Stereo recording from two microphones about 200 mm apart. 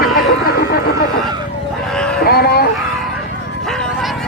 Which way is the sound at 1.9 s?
5° left (ahead or behind).